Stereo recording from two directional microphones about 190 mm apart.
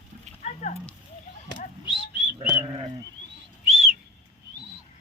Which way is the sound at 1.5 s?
25° left (ahead or behind).